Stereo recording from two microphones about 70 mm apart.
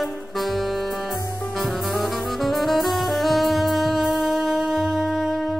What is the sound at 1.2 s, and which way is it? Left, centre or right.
Music, left.